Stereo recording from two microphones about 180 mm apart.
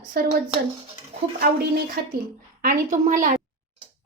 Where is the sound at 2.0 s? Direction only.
60° right (ahead or behind).